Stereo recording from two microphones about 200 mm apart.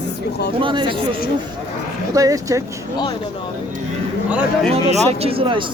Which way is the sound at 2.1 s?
15° right (ahead or behind).